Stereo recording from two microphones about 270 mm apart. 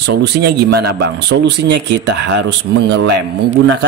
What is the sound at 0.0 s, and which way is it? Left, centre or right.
A man's voice, right.